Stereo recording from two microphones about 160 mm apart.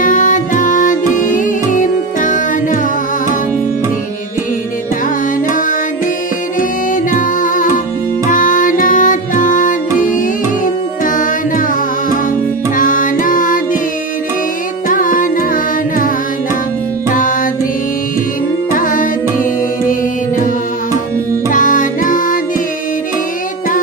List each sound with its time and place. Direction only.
0.0 s music: 55° left (ahead or behind)
7.1 s music: 55° left (ahead or behind)
12.7 s music: 55° left (ahead or behind)
14.9 s carnatic music: 55° left (ahead or behind)
17.1 s music: 55° left (ahead or behind)
18.7 s music: 60° left (ahead or behind)
21.5 s music: 55° left (ahead or behind)